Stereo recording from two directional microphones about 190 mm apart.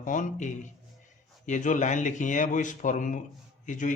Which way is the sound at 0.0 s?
40° left (ahead or behind).